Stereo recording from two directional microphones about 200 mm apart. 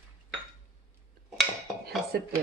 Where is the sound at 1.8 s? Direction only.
50° right (ahead or behind).